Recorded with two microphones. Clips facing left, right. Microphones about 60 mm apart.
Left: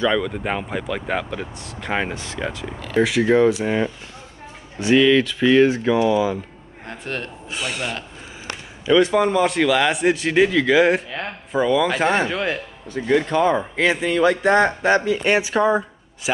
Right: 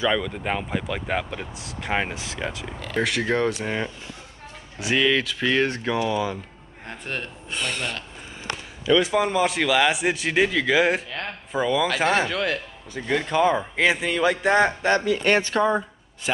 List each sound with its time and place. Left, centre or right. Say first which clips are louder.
0.0 s a man's voice: left 3 dB; centre
9.0 s a man's voice: left 4 dB; centre
12.3 s speech: left 2 dB; centre
13.0 s a man's voice: left 3 dB; centre
15.0 s speech: left 2 dB; left
15.3 s speech: left 3 dB; centre